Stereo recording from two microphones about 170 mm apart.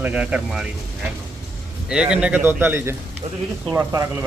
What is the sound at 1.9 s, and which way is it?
Speech, 5° right (ahead or behind).